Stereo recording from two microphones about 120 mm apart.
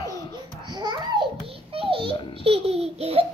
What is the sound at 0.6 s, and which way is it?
Babbling, 35° right (ahead or behind).